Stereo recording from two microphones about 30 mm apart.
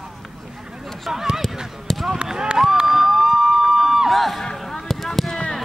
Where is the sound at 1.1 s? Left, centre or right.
Centre.